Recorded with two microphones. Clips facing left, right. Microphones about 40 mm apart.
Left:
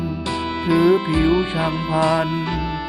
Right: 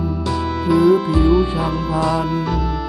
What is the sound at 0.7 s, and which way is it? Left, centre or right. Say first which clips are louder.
Music: right 2 dB; left.